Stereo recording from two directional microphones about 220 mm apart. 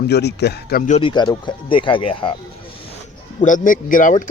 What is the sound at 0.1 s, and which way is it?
Speech, 50° left (ahead or behind).